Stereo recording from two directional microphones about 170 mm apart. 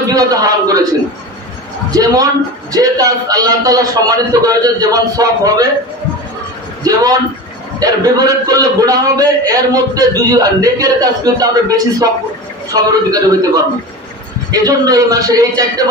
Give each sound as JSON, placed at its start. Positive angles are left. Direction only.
{"t": 0.1, "sound": "a man's voice", "side_deg": -20}
{"t": 1.9, "sound": "a man's voice", "side_deg": -20}
{"t": 6.8, "sound": "a man's voice", "side_deg": -20}
{"t": 14.5, "sound": "a man's voice", "side_deg": -20}